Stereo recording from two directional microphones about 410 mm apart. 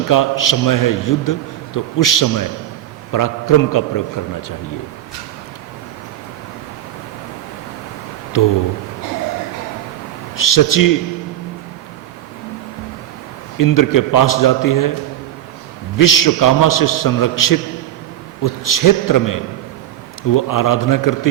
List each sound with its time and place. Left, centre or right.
0.1 s a man's voice: left
8.3 s a man's voice: left
10.3 s a man's voice: left
13.6 s a man's voice: left
16.0 s a man's voice: left